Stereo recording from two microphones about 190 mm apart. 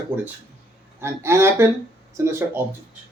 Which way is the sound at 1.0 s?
15° right (ahead or behind).